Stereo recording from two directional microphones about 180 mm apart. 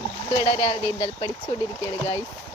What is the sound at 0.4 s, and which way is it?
A woman's voice, 25° left (ahead or behind).